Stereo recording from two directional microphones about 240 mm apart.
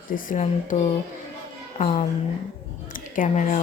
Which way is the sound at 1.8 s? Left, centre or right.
Left.